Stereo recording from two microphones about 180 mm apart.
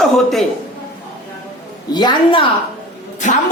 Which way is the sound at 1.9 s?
25° left (ahead or behind).